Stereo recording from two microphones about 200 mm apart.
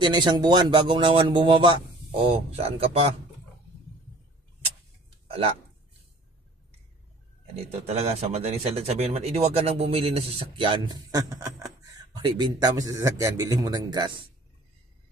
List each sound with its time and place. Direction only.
0.0 s speech: 20° right (ahead or behind)
7.5 s speech: 30° right (ahead or behind)